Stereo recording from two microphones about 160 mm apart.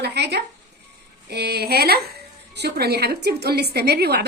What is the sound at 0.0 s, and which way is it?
Speech, 90° right.